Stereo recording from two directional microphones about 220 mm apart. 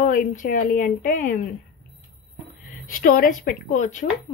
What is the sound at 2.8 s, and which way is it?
Speech, 40° left (ahead or behind).